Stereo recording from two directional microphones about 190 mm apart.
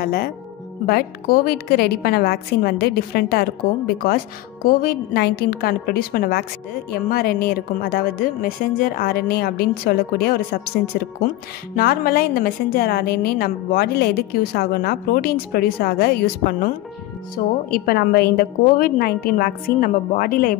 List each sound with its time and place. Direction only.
0.0 s a woman's voice: 55° left (ahead or behind)
11.7 s a woman's voice: 50° left (ahead or behind)